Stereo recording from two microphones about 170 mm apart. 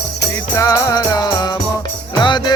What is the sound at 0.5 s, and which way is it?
Music, 20° left (ahead or behind).